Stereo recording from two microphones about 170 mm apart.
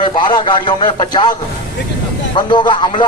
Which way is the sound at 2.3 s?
25° left (ahead or behind).